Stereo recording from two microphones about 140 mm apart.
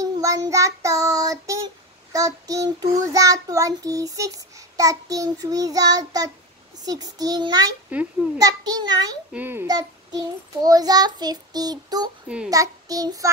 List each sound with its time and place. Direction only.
0.0 s child singing: 25° right (ahead or behind)
7.9 s a child's voice: 10° right (ahead or behind)
8.4 s child singing: 25° right (ahead or behind)
9.3 s a child's voice: 15° right (ahead or behind)
9.7 s child singing: 30° right (ahead or behind)